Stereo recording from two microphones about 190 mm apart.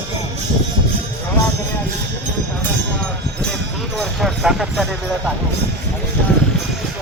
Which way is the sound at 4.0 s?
Centre (ahead or behind).